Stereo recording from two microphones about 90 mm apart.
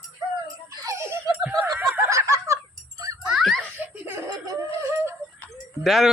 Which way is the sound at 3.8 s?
25° right (ahead or behind).